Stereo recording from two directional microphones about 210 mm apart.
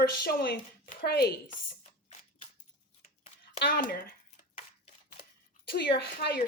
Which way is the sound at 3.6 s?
45° left (ahead or behind).